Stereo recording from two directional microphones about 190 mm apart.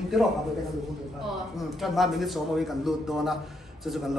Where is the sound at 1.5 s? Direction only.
Centre (ahead or behind).